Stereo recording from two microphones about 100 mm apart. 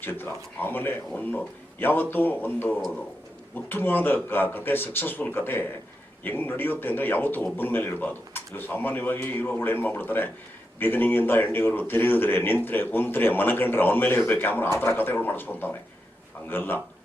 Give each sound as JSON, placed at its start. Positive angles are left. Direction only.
{"t": 0.0, "sound": "a man's voice", "side_deg": 20}